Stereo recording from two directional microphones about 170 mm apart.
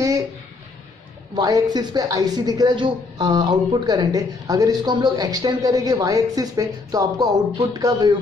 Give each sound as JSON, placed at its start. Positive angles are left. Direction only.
{"t": 1.3, "sound": "speech", "side_deg": -25}